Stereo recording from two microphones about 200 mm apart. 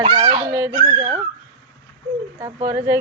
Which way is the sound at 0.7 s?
30° right (ahead or behind).